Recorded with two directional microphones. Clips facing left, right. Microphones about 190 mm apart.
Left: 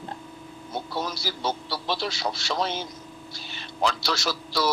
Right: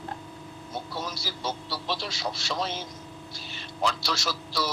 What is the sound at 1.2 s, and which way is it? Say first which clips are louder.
Speech: left 4 dB; 70° left (ahead or behind).